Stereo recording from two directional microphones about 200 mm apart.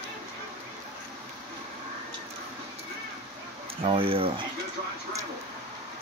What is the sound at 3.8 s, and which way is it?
Speech, 25° right (ahead or behind).